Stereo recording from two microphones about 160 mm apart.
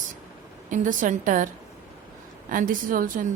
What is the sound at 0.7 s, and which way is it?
Speech, 55° right (ahead or behind).